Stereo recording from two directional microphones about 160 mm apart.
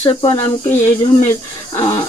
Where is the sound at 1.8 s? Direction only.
30° left (ahead or behind).